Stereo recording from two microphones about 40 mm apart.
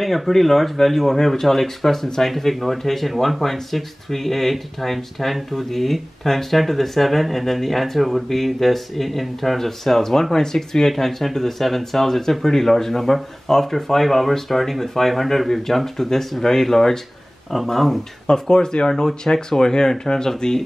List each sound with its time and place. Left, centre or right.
0.0 s speech: centre
18.3 s speech: centre